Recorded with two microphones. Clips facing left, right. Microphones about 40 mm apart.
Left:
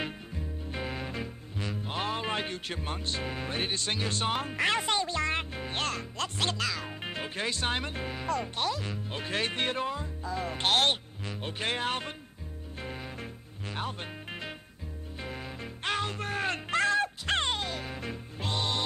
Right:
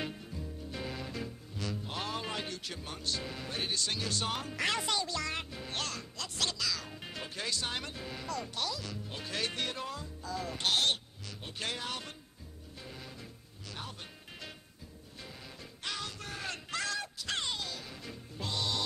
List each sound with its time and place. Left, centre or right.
0.7 s music: left
4.6 s speech: left
12.8 s music: left